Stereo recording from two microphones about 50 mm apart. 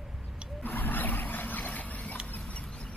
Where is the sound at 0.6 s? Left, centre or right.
Left.